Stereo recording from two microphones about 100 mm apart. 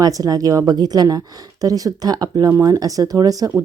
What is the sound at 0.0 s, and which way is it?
Speech, 40° right (ahead or behind).